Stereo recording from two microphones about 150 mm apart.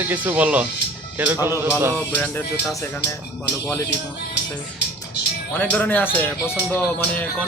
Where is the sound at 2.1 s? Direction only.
10° left (ahead or behind).